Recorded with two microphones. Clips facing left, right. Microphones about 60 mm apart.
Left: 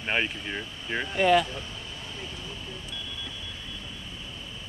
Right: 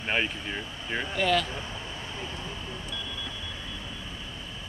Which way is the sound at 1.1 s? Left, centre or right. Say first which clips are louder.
Left 5 dB; centre.